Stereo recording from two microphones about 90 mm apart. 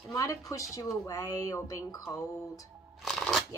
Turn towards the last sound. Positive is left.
turn(degrees=0)  # may be behind; listen again after turning